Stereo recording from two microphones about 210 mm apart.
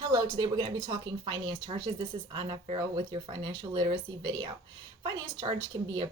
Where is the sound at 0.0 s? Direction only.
20° right (ahead or behind).